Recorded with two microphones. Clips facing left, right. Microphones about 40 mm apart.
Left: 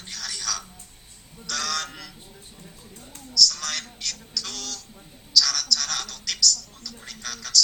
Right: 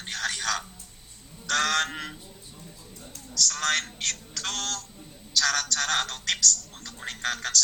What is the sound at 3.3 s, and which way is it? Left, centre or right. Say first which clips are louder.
A woman's voice: left 1 dB; right.